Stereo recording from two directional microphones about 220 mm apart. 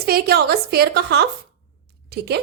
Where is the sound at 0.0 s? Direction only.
45° right (ahead or behind).